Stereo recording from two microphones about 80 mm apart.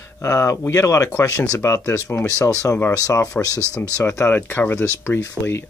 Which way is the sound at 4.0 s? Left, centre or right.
Left.